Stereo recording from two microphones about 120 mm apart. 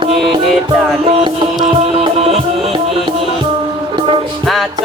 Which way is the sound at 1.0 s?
50° right (ahead or behind).